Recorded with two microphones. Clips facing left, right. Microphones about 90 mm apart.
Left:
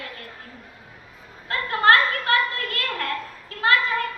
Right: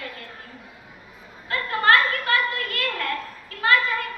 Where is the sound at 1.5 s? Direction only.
35° left (ahead or behind).